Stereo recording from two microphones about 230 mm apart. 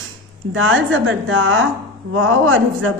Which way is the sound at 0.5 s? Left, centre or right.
Right.